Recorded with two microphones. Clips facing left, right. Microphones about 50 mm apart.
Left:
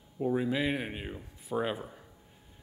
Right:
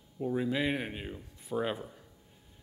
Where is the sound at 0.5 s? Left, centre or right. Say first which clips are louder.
Left 1 dB; centre.